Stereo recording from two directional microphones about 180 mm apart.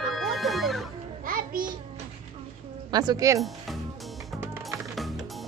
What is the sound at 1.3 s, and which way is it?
Music, 50° right (ahead or behind).